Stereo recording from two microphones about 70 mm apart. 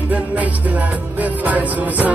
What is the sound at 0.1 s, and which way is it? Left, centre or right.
Music, right.